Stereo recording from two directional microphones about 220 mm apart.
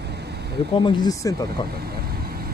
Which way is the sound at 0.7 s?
20° left (ahead or behind).